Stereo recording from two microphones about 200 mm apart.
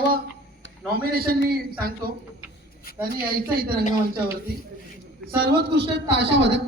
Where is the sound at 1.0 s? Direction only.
50° right (ahead or behind).